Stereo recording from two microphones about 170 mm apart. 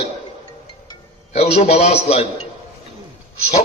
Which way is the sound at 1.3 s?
40° left (ahead or behind).